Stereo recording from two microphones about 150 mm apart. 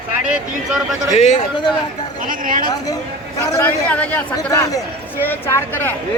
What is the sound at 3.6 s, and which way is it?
Speech, 10° left (ahead or behind).